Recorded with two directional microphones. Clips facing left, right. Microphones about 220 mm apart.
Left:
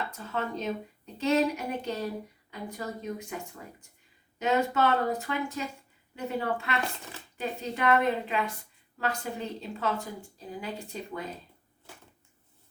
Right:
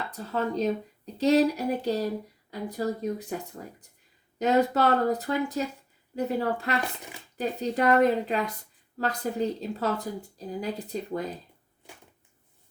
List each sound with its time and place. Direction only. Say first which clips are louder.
0.1 s a woman's voice: right 4 dB; 35° right (ahead or behind)